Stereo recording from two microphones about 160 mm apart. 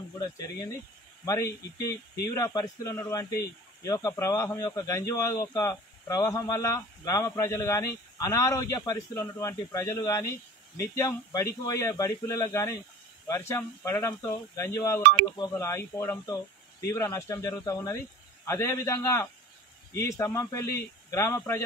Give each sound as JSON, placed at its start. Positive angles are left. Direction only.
{"t": 0.2, "sound": "speech", "side_deg": 25}